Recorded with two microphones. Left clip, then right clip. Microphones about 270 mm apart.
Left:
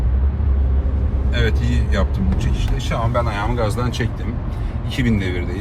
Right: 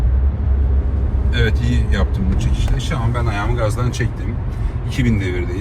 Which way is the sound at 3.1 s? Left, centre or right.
Left.